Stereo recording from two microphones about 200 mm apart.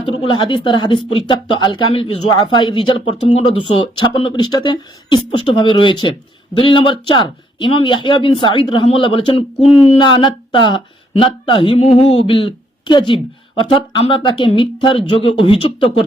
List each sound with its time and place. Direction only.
0.0 s speech: 25° left (ahead or behind)